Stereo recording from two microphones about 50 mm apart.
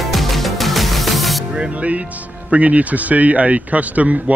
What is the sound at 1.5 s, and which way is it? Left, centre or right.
A man's voice, right.